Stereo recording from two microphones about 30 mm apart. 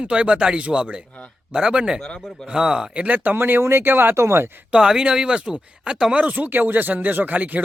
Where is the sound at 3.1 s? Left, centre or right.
Right.